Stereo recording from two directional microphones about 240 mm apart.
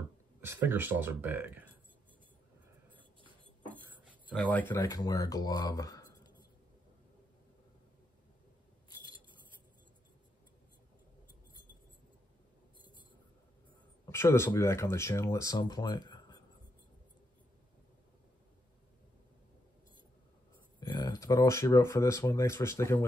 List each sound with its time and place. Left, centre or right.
0.4 s speech: centre
4.3 s speech: centre
14.0 s speech: centre
20.8 s speech: centre